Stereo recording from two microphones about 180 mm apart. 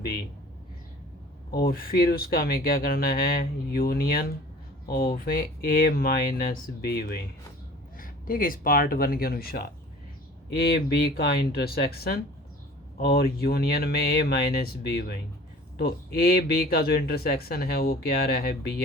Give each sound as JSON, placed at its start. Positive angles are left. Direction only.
{"t": 1.5, "sound": "speech", "side_deg": 60}
{"t": 16.1, "sound": "speech", "side_deg": 55}